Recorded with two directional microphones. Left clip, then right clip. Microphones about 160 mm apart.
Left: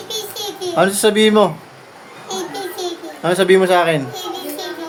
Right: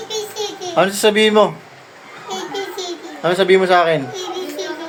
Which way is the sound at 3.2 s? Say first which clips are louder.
Even; 15° left (ahead or behind).